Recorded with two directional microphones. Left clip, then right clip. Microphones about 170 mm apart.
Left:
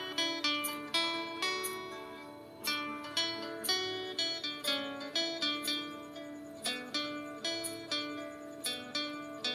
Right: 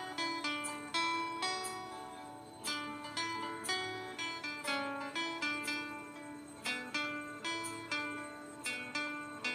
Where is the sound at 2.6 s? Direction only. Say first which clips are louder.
Left 4 dB; 30° left (ahead or behind).